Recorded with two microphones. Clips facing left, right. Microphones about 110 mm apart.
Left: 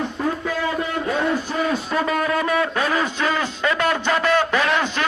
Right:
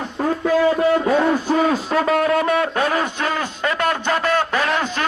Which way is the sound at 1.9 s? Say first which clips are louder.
Right 4 dB; 70° right (ahead or behind).